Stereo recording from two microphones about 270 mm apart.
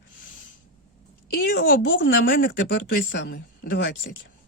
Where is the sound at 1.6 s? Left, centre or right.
Left.